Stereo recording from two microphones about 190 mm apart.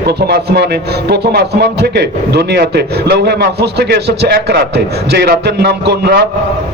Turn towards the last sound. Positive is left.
turn(degrees=-60)  # may be behind; listen again after turning